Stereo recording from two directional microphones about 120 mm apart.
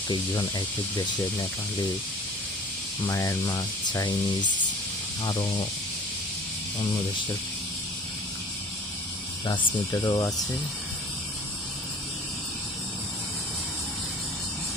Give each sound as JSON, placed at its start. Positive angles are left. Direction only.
{"t": 0.1, "sound": "speech", "side_deg": 40}
{"t": 3.1, "sound": "speech", "side_deg": 25}
{"t": 5.2, "sound": "speech", "side_deg": 35}
{"t": 9.5, "sound": "speech", "side_deg": 35}